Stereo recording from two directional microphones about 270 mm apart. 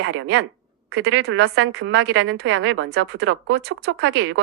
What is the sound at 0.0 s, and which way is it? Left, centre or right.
A woman's voice, right.